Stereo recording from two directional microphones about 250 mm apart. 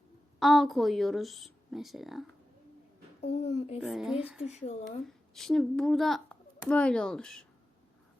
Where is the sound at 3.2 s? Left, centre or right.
Left.